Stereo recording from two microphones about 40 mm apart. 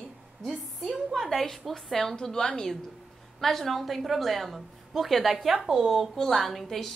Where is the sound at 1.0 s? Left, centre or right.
Centre.